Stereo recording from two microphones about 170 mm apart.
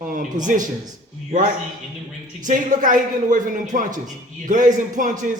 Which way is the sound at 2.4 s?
50° right (ahead or behind).